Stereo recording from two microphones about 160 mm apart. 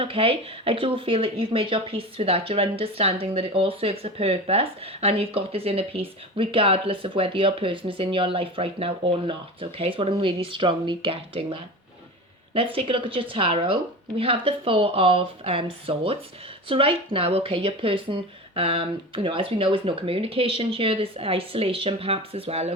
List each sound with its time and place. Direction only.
0.0 s speech: 35° right (ahead or behind)